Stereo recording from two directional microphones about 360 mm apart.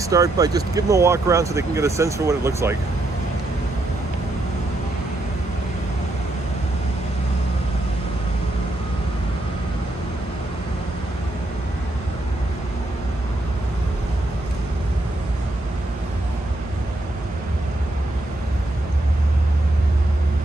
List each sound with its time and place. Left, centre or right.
0.0 s speech: centre